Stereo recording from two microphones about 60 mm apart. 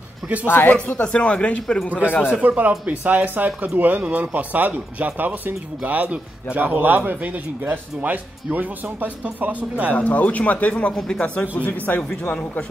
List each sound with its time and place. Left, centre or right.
0.5 s speech: left
0.9 s speech: centre
1.9 s speech: right
9.9 s speech: left